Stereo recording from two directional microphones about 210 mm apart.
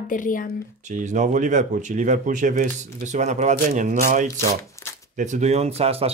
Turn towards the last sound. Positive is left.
turn(degrees=-30)  # may be behind; listen again after turning